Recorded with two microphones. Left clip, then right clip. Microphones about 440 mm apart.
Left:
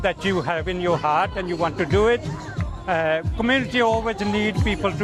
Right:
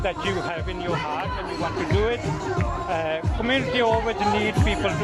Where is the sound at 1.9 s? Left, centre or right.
Left.